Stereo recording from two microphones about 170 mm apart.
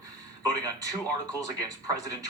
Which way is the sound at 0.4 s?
20° right (ahead or behind).